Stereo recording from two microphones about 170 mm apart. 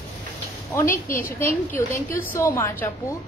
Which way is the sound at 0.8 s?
55° left (ahead or behind).